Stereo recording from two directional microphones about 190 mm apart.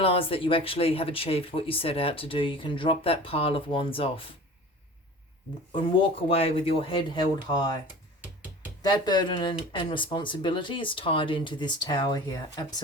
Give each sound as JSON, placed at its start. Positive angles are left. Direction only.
{"t": 0.0, "sound": "speech", "side_deg": 30}
{"t": 5.7, "sound": "speech", "side_deg": 30}
{"t": 8.8, "sound": "speech", "side_deg": 20}